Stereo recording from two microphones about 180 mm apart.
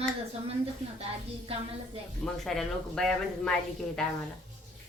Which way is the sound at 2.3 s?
Centre (ahead or behind).